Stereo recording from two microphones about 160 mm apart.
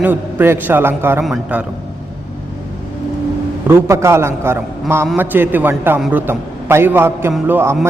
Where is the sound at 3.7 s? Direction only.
15° right (ahead or behind).